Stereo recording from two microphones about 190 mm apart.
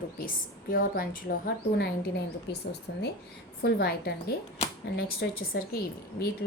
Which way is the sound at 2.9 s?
70° left (ahead or behind).